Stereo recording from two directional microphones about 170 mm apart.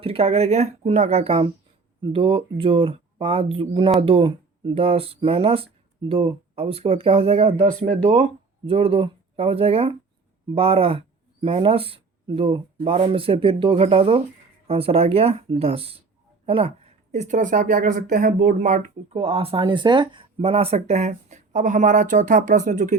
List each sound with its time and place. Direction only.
0.0 s speech: 35° right (ahead or behind)